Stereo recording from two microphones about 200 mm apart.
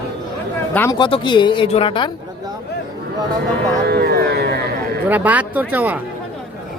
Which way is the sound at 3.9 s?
55° right (ahead or behind).